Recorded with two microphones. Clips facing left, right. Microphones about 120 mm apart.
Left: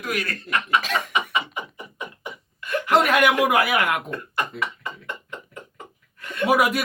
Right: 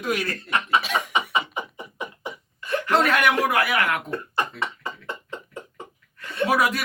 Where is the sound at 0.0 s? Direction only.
25° right (ahead or behind).